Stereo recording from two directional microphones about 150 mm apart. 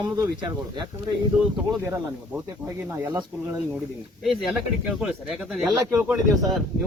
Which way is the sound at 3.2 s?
5° right (ahead or behind).